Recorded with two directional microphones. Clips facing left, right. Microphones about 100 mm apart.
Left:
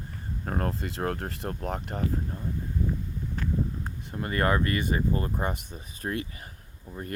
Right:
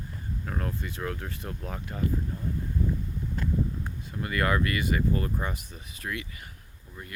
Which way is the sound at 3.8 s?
35° left (ahead or behind).